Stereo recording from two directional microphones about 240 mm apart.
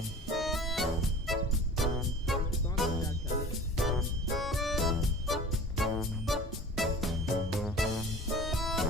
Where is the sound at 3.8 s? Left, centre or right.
Centre.